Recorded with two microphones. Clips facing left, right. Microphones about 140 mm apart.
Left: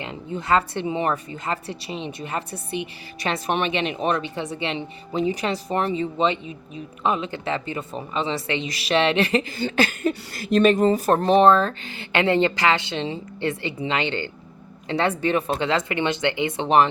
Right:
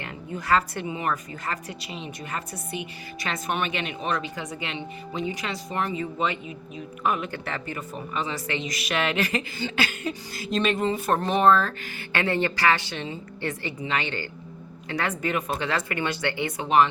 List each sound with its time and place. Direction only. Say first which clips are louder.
0.0 s speech: left 4 dB; 20° left (ahead or behind)
9.6 s speech: left 6 dB; 40° left (ahead or behind)
10.7 s speech: left 5 dB; 40° left (ahead or behind)